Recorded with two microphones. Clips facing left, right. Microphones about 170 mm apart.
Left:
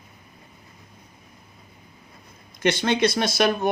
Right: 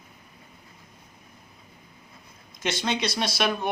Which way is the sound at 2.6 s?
55° left (ahead or behind).